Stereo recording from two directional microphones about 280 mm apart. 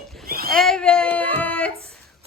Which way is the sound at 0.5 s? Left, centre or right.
Centre.